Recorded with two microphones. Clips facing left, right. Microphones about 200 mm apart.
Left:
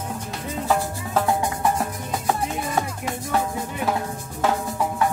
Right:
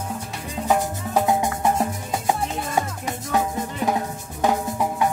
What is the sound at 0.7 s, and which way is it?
Music, 15° right (ahead or behind).